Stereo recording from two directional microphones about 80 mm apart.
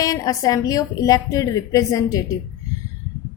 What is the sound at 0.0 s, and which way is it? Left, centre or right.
A woman's voice, left.